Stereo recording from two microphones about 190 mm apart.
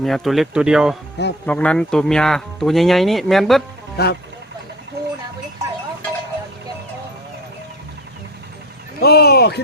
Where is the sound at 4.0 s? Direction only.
60° left (ahead or behind).